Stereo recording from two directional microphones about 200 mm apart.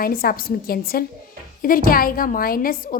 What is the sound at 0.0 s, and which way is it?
Speech, 45° left (ahead or behind).